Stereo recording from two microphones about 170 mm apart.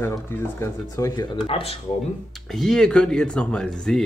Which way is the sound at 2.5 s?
5° left (ahead or behind).